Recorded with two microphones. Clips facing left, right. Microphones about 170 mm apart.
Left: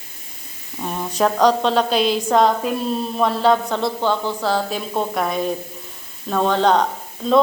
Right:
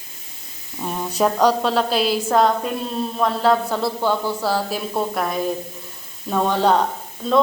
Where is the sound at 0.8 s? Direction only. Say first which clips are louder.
Even; centre (ahead or behind).